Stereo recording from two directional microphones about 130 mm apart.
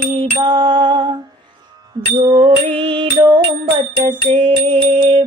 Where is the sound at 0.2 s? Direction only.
40° right (ahead or behind).